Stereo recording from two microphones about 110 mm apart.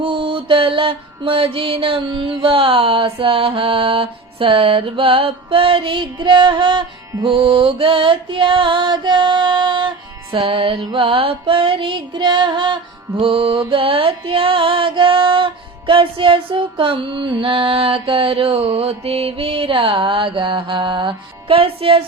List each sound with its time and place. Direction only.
0.0 s music: 50° right (ahead or behind)
10.5 s music: 55° right (ahead or behind)